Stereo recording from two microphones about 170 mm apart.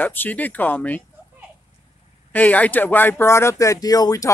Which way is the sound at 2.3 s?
10° left (ahead or behind).